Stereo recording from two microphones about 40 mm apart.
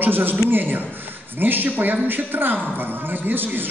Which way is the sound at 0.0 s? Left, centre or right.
Right.